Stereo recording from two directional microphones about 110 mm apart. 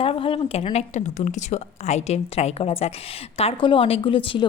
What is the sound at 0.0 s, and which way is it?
Speech, 55° left (ahead or behind).